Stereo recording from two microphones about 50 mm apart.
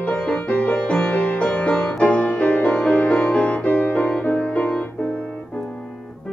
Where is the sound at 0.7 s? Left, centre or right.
Centre.